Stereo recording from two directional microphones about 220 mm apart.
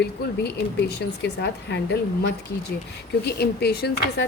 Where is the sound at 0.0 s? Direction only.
50° left (ahead or behind).